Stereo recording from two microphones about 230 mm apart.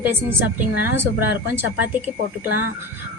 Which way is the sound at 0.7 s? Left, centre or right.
Left.